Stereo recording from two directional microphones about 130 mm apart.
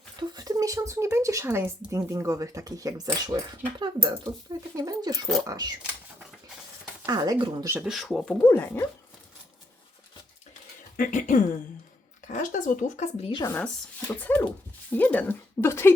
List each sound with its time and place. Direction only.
0.2 s a sound: 30° right (ahead or behind)
1.9 s speech: 20° right (ahead or behind)
7.1 s speech: 30° right (ahead or behind)
7.6 s speech: 15° right (ahead or behind)
7.9 s speech: centre (ahead or behind)
8.4 s speech: 15° left (ahead or behind)
10.9 s speech: 85° left
13.4 s speech: 15° left (ahead or behind)